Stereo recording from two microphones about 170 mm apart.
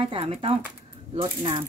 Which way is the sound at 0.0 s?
35° right (ahead or behind).